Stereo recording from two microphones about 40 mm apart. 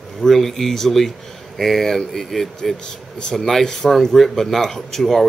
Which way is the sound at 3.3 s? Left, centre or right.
Centre.